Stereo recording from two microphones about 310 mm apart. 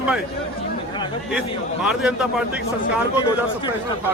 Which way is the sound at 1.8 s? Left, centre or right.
Centre.